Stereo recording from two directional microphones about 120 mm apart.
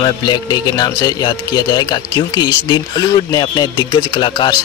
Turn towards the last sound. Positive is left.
turn(degrees=40)  # may be behind; listen again after turning